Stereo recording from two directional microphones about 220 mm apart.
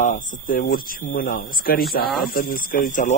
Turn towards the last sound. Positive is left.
turn(degrees=35)  # may be behind; listen again after turning